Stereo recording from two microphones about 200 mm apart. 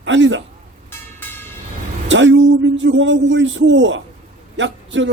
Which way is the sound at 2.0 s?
65° right (ahead or behind).